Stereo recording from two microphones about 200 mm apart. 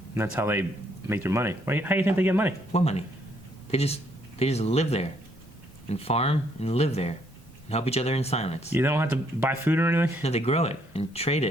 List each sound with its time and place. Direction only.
0.1 s speech: 10° right (ahead or behind)
2.7 s speech: 30° left (ahead or behind)
8.7 s speech: 10° right (ahead or behind)
10.2 s speech: 30° left (ahead or behind)